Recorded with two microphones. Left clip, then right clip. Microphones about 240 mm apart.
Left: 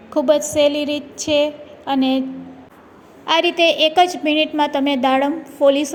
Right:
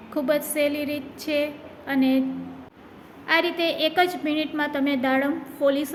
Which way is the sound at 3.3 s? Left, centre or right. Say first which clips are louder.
Left 7 dB; left.